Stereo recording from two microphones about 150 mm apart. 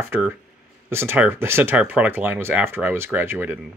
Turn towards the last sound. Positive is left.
turn(degrees=-15)  # may be behind; listen again after turning